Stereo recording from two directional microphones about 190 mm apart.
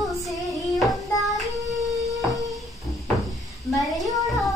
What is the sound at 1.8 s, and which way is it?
Music, 20° right (ahead or behind).